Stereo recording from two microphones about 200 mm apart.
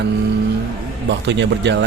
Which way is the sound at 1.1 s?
60° right (ahead or behind).